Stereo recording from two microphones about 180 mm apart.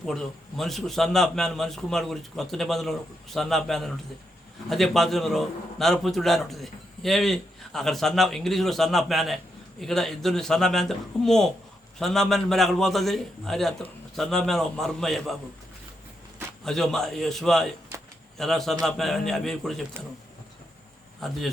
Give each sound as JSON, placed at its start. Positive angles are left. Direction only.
{"t": 0.0, "sound": "a man's voice", "side_deg": 0}
{"t": 16.6, "sound": "a man's voice", "side_deg": 0}